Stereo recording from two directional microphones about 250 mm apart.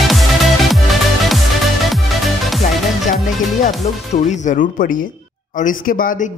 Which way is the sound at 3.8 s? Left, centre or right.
Left.